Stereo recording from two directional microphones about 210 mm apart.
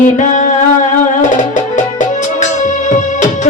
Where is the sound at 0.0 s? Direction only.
35° left (ahead or behind).